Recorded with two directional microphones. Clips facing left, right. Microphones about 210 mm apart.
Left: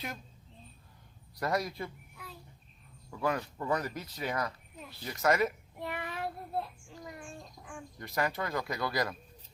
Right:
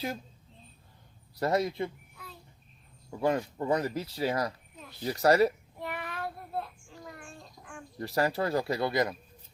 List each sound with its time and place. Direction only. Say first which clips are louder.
1.4 s speech: right 5 dB; 25° right (ahead or behind)
3.1 s speech: right 4 dB; 25° right (ahead or behind)
5.8 s child singing: even; 20° left (ahead or behind)
7.6 s bird: right 1 dB; centre (ahead or behind)
7.9 s speech: right 5 dB; 35° right (ahead or behind)